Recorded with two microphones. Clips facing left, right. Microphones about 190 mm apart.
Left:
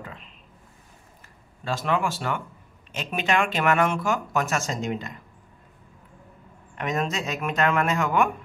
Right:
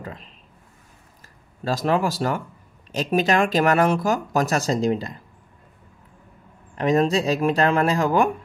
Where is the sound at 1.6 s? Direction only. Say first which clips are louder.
Right 4 dB; 40° right (ahead or behind).